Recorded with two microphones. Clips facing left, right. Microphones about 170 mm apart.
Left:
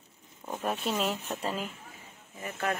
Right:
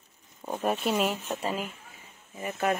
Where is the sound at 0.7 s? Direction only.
10° right (ahead or behind).